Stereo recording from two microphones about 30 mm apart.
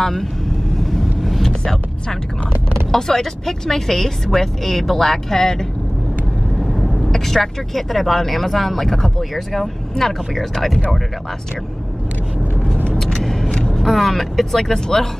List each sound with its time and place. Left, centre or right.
0.0 s speech: centre
0.8 s vehicle: centre
2.9 s speech: centre
6.6 s speech: centre
13.0 s vehicle: centre
13.7 s speech: centre